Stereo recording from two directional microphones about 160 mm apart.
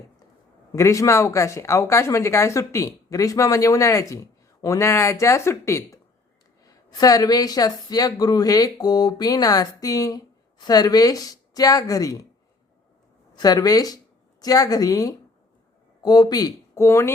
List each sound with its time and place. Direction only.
0.7 s speech: 20° left (ahead or behind)
13.3 s speech: 25° left (ahead or behind)